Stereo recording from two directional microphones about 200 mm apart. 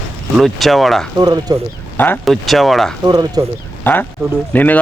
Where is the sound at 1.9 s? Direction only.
10° left (ahead or behind).